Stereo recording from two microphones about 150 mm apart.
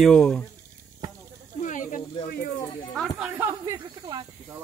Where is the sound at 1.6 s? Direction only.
60° left (ahead or behind).